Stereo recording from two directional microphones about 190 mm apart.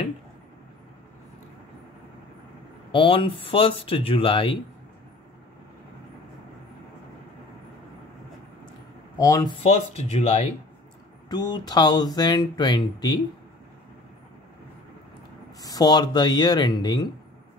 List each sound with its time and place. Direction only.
2.9 s speech: 25° left (ahead or behind)
9.2 s speech: 20° left (ahead or behind)
9.6 s speech: 30° left (ahead or behind)
11.2 s speech: 20° left (ahead or behind)
15.6 s speech: 20° left (ahead or behind)